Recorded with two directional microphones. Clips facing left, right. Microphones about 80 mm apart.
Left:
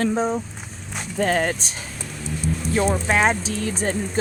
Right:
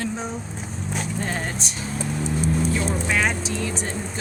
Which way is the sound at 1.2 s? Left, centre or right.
Left.